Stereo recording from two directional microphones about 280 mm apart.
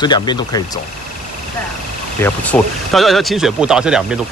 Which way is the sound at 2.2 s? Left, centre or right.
Centre.